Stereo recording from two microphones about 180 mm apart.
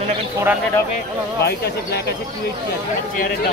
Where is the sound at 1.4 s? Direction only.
65° left (ahead or behind).